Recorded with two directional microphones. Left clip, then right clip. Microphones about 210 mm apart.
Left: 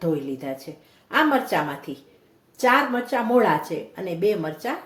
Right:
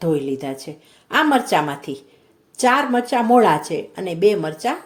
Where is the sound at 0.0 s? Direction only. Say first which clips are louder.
Right 5 dB; 45° right (ahead or behind).